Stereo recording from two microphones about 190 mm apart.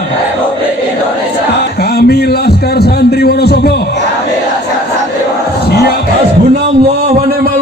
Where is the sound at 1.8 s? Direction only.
55° left (ahead or behind).